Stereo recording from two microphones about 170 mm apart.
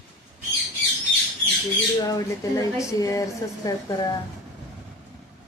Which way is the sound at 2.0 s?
20° left (ahead or behind).